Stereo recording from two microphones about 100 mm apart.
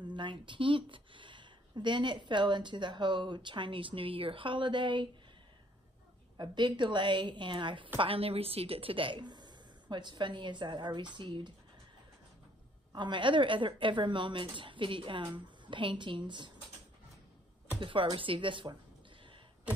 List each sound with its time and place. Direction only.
0.0 s speech: 50° right (ahead or behind)
6.3 s speech: 50° right (ahead or behind)
8.0 s speech: 70° right (ahead or behind); by 11.5 s 50° right (ahead or behind)
12.9 s speech: 50° right (ahead or behind)
17.7 s speech: 60° right (ahead or behind)